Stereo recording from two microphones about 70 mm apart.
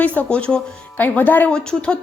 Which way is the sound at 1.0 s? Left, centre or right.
Left.